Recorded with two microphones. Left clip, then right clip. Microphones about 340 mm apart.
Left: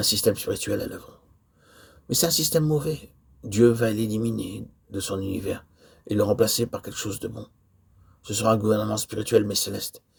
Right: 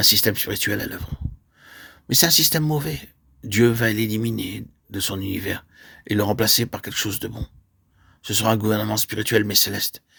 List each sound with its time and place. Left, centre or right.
0.0 s speech: right
8.3 s speech: right
8.7 s speech: right
9.2 s speech: right